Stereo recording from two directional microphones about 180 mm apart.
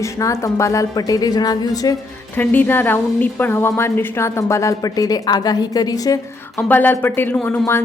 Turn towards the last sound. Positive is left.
turn(degrees=10)  # may be behind; listen again after turning